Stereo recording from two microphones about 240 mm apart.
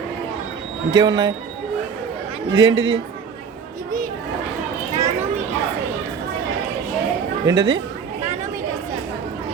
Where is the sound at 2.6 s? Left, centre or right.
Right.